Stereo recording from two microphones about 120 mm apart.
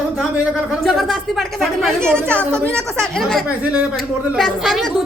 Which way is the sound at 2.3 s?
10° left (ahead or behind).